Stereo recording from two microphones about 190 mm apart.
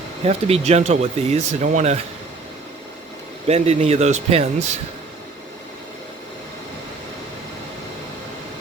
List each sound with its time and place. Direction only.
0.3 s speech: 35° right (ahead or behind)
3.4 s speech: 35° right (ahead or behind)